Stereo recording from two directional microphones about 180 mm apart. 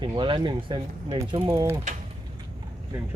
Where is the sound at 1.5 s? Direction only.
15° right (ahead or behind).